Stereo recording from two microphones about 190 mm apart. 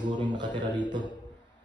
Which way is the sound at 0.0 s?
25° right (ahead or behind).